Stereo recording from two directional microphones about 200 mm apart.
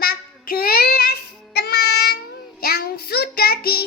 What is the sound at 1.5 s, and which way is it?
Music, 55° left (ahead or behind).